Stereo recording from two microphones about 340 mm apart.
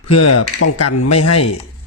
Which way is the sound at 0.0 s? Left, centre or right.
Left.